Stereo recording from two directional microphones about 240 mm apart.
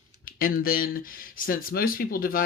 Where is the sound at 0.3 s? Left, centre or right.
Left.